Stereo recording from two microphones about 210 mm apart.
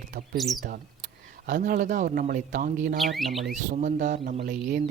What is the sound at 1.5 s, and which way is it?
Speech, 40° right (ahead or behind).